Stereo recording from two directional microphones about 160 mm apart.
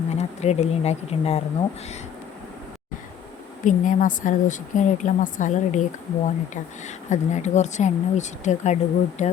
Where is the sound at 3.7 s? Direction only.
55° left (ahead or behind).